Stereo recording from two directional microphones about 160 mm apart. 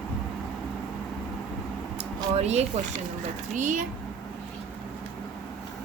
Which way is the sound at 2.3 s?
45° right (ahead or behind).